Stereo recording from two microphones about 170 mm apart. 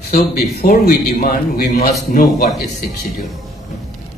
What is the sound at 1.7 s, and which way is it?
Speech, 50° left (ahead or behind).